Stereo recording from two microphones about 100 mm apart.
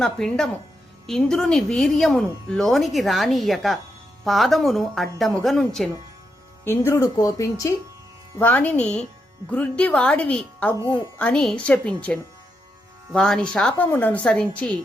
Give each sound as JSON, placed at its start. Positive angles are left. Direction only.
{"t": 0.0, "sound": "speech", "side_deg": 5}
{"t": 6.7, "sound": "speech", "side_deg": 25}
{"t": 8.4, "sound": "a woman's voice", "side_deg": 15}